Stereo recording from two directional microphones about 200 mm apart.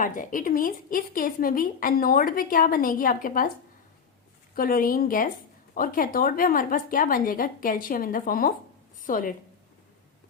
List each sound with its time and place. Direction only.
0.0 s a woman's voice: 40° left (ahead or behind)
4.5 s a woman's voice: 45° left (ahead or behind)
9.0 s a sound: 45° left (ahead or behind)